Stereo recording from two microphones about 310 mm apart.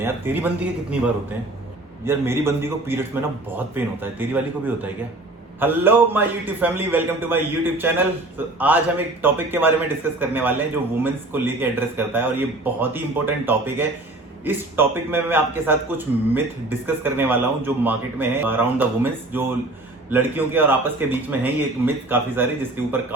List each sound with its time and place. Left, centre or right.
0.0 s a man's voice: centre